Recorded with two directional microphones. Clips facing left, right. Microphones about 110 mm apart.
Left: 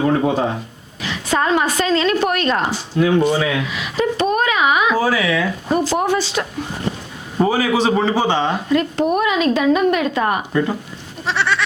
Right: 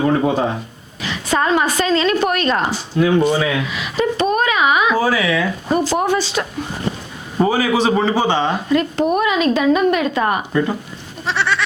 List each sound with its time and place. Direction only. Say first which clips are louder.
0.0 s a sound: right 1 dB; 30° right (ahead or behind)
1.0 s a woman's voice: right 1 dB; 20° right (ahead or behind)
6.4 s a woman's voice: even; 30° right (ahead or behind)
11.3 s goat: even; centre (ahead or behind)